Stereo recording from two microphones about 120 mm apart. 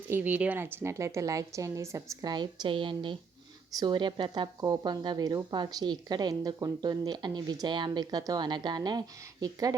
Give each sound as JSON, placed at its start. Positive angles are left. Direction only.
{"t": 0.1, "sound": "a woman's voice", "side_deg": -15}
{"t": 2.3, "sound": "speech", "side_deg": -35}